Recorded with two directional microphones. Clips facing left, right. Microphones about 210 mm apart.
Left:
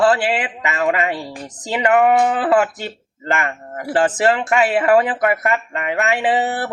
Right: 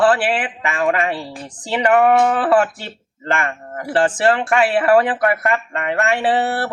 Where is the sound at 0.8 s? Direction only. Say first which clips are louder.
Even; 10° left (ahead or behind).